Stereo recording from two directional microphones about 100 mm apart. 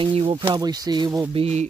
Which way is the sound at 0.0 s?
70° right (ahead or behind).